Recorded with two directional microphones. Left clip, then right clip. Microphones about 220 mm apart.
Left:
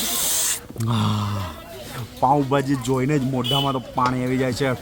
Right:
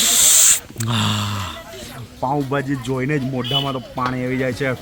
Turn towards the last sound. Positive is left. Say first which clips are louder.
# right 1 dB
turn(degrees=10)  # may be behind; listen again after turning